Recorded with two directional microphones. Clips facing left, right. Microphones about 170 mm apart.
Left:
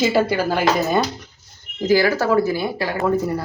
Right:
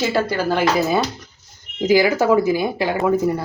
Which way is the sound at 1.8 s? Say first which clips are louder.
Right 1 dB; 15° right (ahead or behind).